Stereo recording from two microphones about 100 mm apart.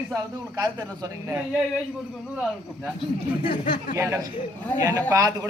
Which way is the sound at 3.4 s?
65° left (ahead or behind).